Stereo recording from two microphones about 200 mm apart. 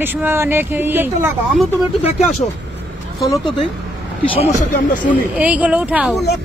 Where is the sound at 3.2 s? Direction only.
25° left (ahead or behind).